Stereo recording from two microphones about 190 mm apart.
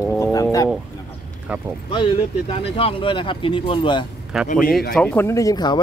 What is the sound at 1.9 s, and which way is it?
Speech, 30° left (ahead or behind).